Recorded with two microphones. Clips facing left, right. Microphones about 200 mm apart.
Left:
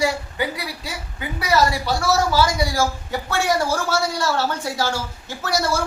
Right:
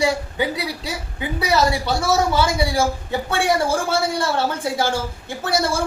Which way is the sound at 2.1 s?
25° right (ahead or behind).